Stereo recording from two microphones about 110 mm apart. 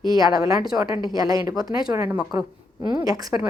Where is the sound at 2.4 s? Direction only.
35° right (ahead or behind).